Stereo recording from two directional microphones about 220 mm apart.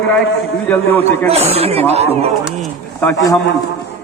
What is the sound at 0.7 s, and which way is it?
Speech, 10° left (ahead or behind).